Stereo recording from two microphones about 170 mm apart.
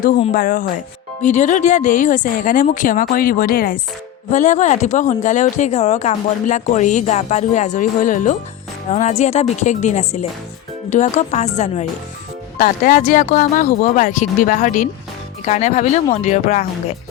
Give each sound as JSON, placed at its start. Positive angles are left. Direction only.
{"t": 0.3, "sound": "speech", "side_deg": 55}
{"t": 4.3, "sound": "speech", "side_deg": 45}